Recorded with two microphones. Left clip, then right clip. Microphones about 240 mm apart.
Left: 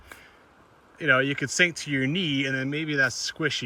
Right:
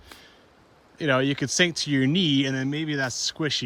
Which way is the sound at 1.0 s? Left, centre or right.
Centre.